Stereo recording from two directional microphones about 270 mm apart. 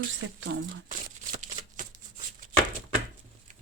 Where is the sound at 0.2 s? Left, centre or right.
Right.